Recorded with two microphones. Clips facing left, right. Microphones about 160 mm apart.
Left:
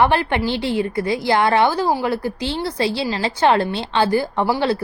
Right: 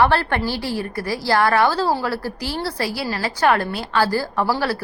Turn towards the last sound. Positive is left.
turn(degrees=20)  # may be behind; listen again after turning